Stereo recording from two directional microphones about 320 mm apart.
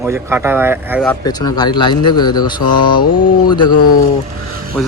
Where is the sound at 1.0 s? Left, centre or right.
Centre.